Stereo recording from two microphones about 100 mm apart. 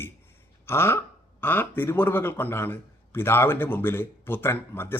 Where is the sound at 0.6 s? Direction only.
25° left (ahead or behind).